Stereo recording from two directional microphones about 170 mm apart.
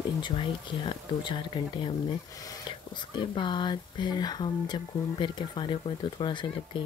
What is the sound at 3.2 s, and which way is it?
Speech, 30° left (ahead or behind).